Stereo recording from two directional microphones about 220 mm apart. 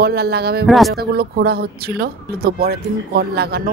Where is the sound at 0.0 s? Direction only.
45° right (ahead or behind).